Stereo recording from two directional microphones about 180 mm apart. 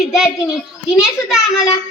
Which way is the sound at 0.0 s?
Centre (ahead or behind).